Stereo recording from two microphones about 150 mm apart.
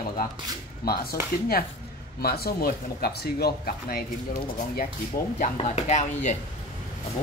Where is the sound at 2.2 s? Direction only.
90° left.